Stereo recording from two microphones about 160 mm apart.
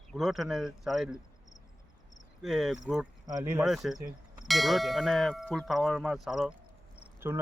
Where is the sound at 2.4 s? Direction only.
Centre (ahead or behind).